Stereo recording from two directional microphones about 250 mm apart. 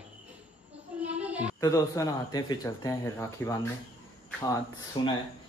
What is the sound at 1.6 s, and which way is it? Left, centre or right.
A man's voice, centre.